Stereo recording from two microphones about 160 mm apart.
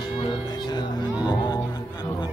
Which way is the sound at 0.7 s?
25° left (ahead or behind).